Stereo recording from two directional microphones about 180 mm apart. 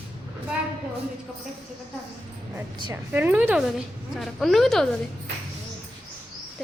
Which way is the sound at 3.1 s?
10° right (ahead or behind).